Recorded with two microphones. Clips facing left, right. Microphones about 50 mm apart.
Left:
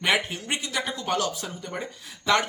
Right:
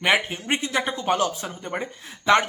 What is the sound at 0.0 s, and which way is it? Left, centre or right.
Speech, right.